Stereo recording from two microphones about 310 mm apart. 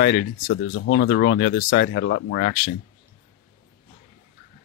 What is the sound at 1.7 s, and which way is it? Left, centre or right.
Speech, left.